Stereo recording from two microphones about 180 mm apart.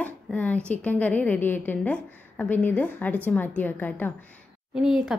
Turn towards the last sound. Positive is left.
turn(degrees=-5)  # may be behind; listen again after turning